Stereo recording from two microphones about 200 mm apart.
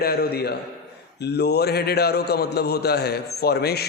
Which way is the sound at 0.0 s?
50° left (ahead or behind).